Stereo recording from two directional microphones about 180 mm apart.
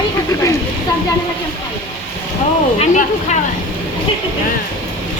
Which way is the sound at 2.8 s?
40° left (ahead or behind).